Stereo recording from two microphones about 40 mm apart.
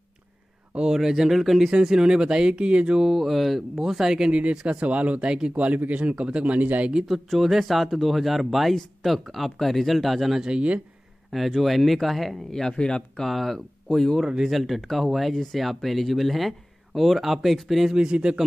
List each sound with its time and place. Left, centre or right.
0.9 s speech: centre
1.7 s speech: centre
3.0 s speech: centre
4.3 s speech: right
6.4 s speech: right
7.2 s speech: centre
10.4 s speech: right
11.3 s speech: centre
12.4 s speech: centre
13.2 s speech: centre
17.9 s speech: right